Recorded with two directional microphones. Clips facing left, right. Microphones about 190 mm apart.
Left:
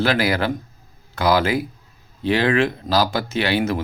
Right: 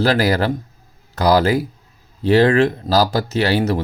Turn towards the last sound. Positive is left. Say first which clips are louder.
# right 3 dB
turn(degrees=-40)  # may be behind; listen again after turning